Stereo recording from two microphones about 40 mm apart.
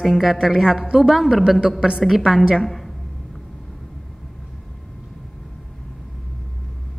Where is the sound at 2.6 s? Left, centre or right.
Centre.